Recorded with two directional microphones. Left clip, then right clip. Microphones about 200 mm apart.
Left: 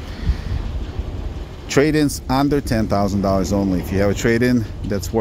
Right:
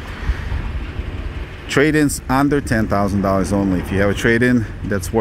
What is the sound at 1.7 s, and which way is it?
Speech, centre (ahead or behind).